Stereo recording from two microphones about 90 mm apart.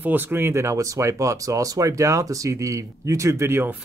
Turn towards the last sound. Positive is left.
turn(degrees=-25)  # may be behind; listen again after turning